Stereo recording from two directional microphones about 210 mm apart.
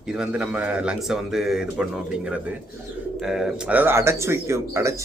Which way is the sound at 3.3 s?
5° right (ahead or behind).